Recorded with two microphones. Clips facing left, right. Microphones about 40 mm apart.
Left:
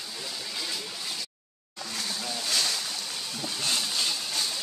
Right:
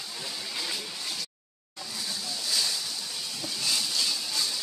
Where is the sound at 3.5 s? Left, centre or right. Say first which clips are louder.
Even; left.